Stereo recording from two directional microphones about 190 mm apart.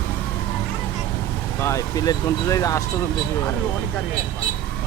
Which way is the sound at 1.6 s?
15° left (ahead or behind).